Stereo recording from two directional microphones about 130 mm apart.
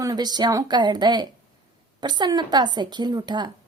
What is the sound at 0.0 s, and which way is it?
A woman's voice, 30° right (ahead or behind).